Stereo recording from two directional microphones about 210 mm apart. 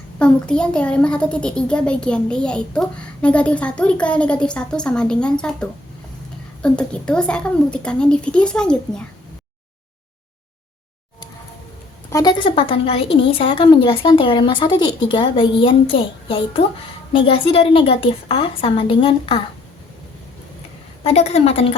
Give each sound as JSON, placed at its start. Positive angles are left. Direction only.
{"t": 0.2, "sound": "a child's voice", "side_deg": 5}
{"t": 12.1, "sound": "a woman's voice", "side_deg": 20}
{"t": 21.0, "sound": "a woman's voice", "side_deg": 30}